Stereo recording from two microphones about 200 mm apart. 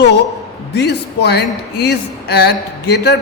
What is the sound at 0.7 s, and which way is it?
Speech, 60° left (ahead or behind).